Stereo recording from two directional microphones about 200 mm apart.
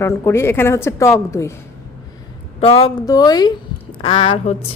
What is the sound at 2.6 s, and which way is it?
A woman's voice, 30° left (ahead or behind).